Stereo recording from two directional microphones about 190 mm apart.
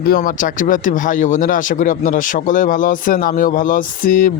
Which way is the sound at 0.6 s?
45° left (ahead or behind).